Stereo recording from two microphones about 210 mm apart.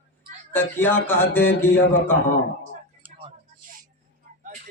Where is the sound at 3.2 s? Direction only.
25° right (ahead or behind).